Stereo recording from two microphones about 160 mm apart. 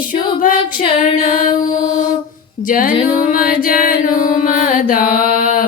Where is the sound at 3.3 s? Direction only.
60° left (ahead or behind).